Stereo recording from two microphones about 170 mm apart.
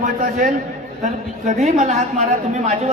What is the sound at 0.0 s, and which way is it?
A man's voice, 50° right (ahead or behind).